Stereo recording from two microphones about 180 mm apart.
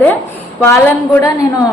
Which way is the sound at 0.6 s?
15° left (ahead or behind).